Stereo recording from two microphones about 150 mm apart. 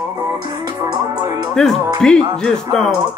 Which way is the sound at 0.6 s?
25° right (ahead or behind).